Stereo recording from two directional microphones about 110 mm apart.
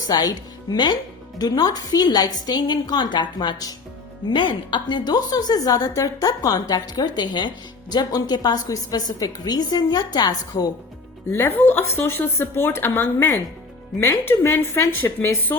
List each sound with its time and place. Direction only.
0.1 s a woman's voice: 35° left (ahead or behind)
11.3 s speech: 20° left (ahead or behind)